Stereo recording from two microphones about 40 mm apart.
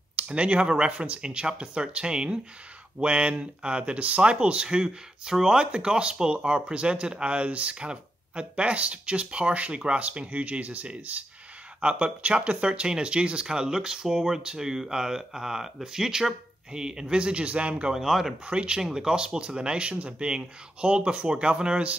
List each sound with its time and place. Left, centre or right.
0.2 s speech: right
4.6 s speech: centre; by 11.2 s right
11.8 s speech: right
17.9 s speech: centre
18.4 s speech: right
18.8 s speech: centre